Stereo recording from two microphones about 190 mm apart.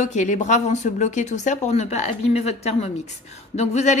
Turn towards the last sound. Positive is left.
turn(degrees=35)  # may be behind; listen again after turning